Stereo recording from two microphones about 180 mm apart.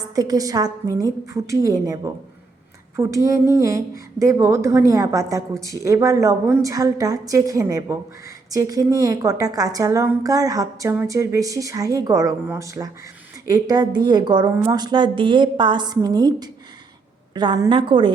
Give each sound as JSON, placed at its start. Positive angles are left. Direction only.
{"t": 0.2, "sound": "a woman's voice", "side_deg": -20}